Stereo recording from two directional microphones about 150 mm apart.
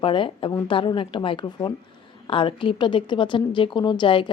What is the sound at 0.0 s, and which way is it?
A woman's voice, 35° left (ahead or behind).